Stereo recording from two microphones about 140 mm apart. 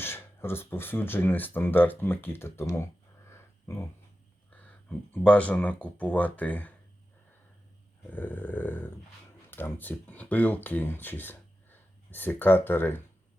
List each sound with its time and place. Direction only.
0.0 s speech: 15° left (ahead or behind)
3.2 s a sound: 20° left (ahead or behind)
4.5 s speech: 15° left (ahead or behind)
8.1 s speech: 15° left (ahead or behind)